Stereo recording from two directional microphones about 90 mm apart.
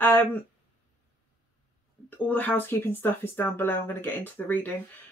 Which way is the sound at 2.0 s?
20° left (ahead or behind).